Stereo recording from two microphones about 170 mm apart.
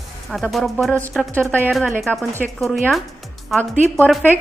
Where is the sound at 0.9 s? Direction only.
15° right (ahead or behind).